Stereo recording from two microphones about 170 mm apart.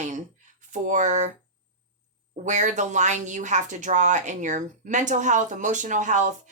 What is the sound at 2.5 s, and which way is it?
A woman's voice, 45° right (ahead or behind).